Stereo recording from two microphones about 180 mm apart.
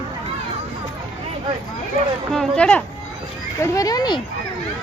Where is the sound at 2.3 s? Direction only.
5° left (ahead or behind).